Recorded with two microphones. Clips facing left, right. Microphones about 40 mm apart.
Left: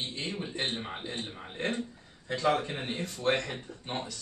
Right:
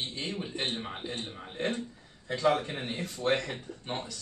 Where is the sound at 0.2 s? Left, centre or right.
Centre.